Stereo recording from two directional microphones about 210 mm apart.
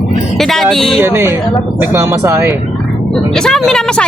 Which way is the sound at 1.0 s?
10° right (ahead or behind).